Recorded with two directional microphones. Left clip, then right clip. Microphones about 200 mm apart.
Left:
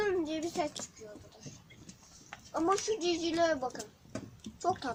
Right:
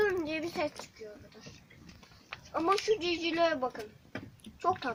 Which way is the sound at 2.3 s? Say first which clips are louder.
Even; 30° right (ahead or behind).